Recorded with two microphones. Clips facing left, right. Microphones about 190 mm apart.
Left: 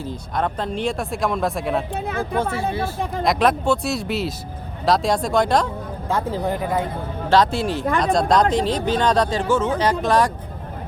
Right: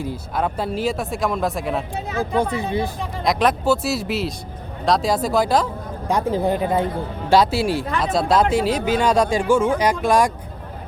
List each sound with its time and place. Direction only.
0.0 s speech: 10° right (ahead or behind)
2.0 s speech: 55° left (ahead or behind)
2.4 s speech: 15° right (ahead or behind)
3.2 s speech: centre (ahead or behind)
6.1 s speech: 15° right (ahead or behind)
7.3 s speech: 10° right (ahead or behind)